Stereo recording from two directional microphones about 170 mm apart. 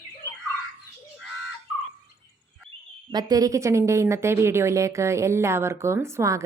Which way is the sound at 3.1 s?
25° right (ahead or behind).